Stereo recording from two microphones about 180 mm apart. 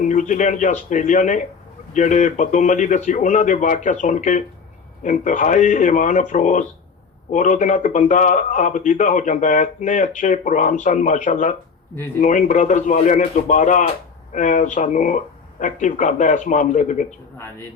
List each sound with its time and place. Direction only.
0.0 s a man's voice: 45° left (ahead or behind)